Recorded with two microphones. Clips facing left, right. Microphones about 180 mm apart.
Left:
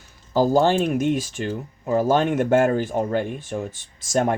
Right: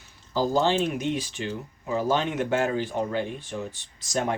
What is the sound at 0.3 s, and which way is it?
Speech, 50° left (ahead or behind).